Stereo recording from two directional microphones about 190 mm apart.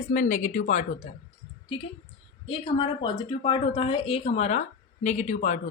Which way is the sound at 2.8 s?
25° left (ahead or behind).